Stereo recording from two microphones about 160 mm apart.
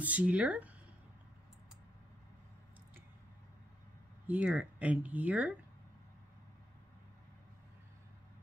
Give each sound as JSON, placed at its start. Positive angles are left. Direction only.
{"t": 0.0, "sound": "speech", "side_deg": -10}
{"t": 4.3, "sound": "speech", "side_deg": -10}